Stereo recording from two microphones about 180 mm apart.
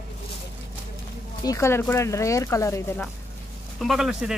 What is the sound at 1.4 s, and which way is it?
Speech, 15° left (ahead or behind).